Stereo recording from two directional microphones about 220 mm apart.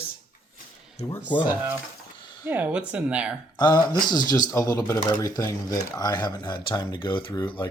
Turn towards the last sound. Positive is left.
turn(degrees=20)  # may be behind; listen again after turning